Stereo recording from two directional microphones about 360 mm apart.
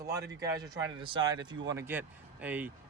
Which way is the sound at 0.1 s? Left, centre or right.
Right.